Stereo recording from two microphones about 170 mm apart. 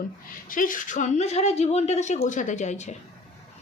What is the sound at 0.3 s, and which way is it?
A woman's voice, 55° left (ahead or behind).